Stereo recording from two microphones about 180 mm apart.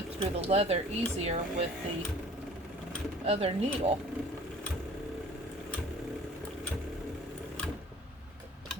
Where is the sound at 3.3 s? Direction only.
35° right (ahead or behind).